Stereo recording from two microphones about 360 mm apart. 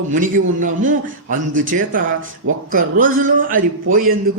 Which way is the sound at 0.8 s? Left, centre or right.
Right.